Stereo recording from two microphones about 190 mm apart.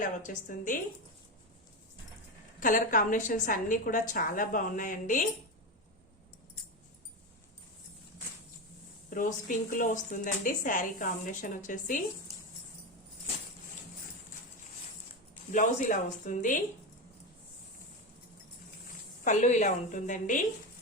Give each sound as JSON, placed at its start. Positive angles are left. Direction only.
{"t": 0.0, "sound": "speech", "side_deg": 45}
{"t": 2.6, "sound": "speech", "side_deg": 45}
{"t": 9.0, "sound": "speech", "side_deg": 45}
{"t": 15.5, "sound": "speech", "side_deg": 40}
{"t": 19.2, "sound": "a woman's voice", "side_deg": 40}